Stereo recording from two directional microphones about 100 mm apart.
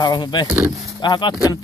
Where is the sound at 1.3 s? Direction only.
35° left (ahead or behind).